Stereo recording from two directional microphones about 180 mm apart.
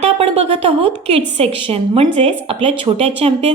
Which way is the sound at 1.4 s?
35° right (ahead or behind).